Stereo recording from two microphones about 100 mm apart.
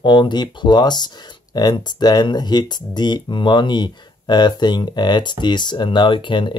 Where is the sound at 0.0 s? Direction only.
50° left (ahead or behind).